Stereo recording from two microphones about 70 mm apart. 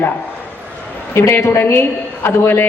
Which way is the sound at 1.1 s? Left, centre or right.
Left.